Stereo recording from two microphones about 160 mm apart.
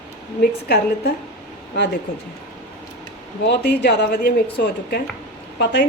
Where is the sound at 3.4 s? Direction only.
90° left.